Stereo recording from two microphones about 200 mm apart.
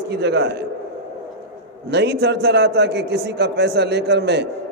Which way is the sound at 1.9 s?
55° right (ahead or behind).